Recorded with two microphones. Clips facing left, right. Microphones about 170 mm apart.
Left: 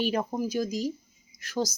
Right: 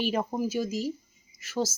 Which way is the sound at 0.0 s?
5° right (ahead or behind).